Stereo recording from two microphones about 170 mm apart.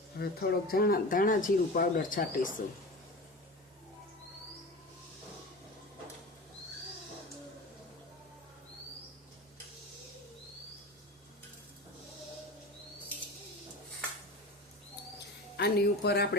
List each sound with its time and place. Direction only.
0.2 s speech: 65° left (ahead or behind)
15.5 s speech: 75° left (ahead or behind)